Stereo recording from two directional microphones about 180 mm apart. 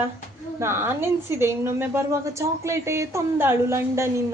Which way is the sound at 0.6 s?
15° right (ahead or behind).